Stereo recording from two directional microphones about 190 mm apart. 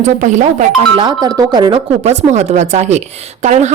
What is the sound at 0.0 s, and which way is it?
Speech, 40° right (ahead or behind).